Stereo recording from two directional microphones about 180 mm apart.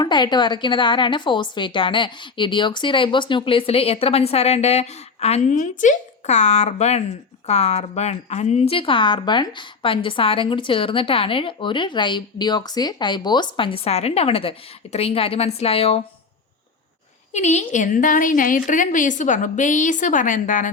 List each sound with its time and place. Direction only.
0.0 s a woman's voice: 25° left (ahead or behind)
17.3 s a woman's voice: 40° left (ahead or behind)